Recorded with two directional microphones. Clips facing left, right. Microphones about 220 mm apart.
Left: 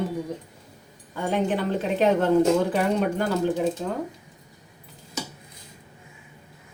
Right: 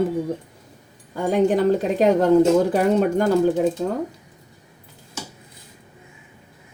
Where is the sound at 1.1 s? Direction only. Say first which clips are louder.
Right 6 dB; 40° right (ahead or behind).